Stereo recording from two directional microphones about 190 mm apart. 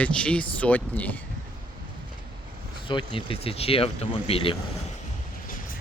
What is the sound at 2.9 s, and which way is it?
Speech, 25° left (ahead or behind).